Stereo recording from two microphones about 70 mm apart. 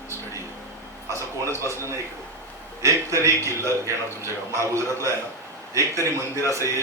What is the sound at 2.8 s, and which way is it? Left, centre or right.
A man's voice, right.